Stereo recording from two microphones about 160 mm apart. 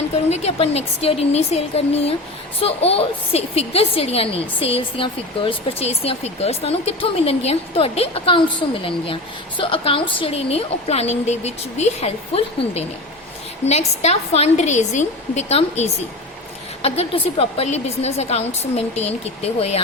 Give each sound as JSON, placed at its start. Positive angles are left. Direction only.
{"t": 0.3, "sound": "a woman's voice", "side_deg": 45}